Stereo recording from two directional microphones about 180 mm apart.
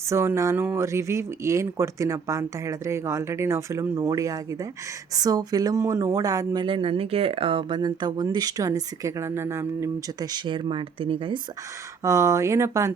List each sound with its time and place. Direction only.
0.1 s speech: 15° right (ahead or behind)
12.0 s speech: 15° right (ahead or behind)